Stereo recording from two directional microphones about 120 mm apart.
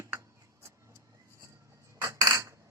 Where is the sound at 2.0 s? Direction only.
30° right (ahead or behind).